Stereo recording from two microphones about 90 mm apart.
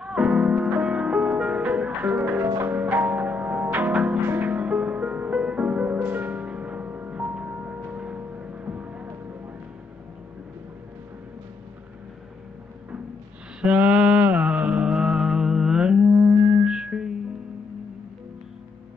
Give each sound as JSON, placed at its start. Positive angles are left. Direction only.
{"t": 0.0, "sound": "music", "side_deg": -10}
{"t": 13.6, "sound": "mantra", "side_deg": -15}
{"t": 16.6, "sound": "music", "side_deg": -10}